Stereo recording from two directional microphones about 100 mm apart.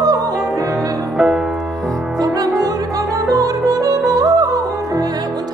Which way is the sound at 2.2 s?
40° right (ahead or behind).